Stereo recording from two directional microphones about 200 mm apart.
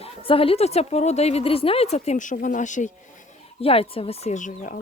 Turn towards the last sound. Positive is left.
turn(degrees=40)  # may be behind; listen again after turning